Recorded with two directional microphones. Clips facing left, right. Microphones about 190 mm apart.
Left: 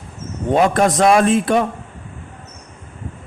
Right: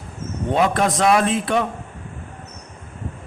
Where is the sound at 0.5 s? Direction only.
45° left (ahead or behind).